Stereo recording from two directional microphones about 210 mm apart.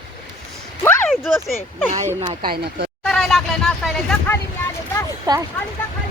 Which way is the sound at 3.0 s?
Centre (ahead or behind).